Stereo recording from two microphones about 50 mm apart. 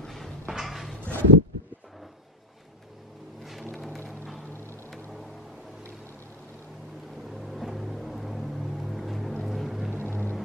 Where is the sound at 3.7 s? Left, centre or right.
Centre.